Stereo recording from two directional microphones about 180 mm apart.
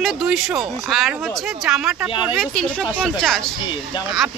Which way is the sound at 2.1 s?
30° left (ahead or behind).